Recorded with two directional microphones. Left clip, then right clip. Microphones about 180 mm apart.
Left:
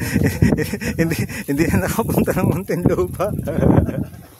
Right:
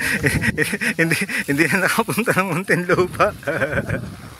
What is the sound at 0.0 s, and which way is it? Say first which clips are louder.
Speech: right 2 dB; 25° left (ahead or behind).